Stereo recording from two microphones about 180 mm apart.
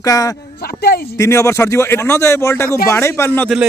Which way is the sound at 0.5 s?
60° left (ahead or behind).